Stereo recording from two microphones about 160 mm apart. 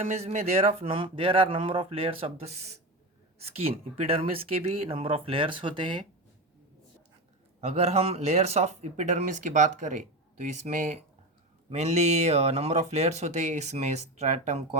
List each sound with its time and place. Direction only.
0.0 s speech: 40° right (ahead or behind)
7.6 s speech: 40° right (ahead or behind)